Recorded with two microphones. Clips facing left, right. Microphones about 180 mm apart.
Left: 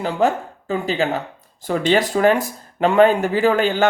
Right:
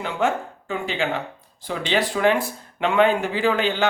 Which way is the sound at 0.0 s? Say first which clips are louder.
Left 4 dB; 35° left (ahead or behind).